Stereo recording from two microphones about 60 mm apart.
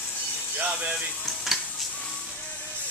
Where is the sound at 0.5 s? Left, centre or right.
Centre.